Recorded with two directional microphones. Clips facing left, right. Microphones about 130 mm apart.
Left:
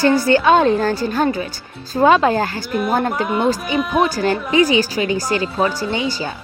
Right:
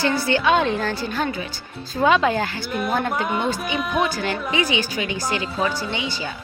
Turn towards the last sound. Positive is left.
turn(degrees=40)  # may be behind; listen again after turning